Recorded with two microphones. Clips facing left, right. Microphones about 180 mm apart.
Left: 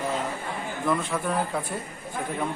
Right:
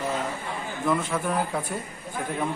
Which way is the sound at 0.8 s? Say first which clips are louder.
Right 1 dB; 5° right (ahead or behind).